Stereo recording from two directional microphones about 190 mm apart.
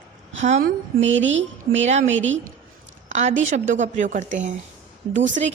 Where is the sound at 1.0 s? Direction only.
80° right.